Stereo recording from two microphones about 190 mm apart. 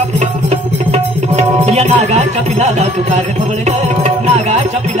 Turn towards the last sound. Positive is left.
turn(degrees=-35)  # may be behind; listen again after turning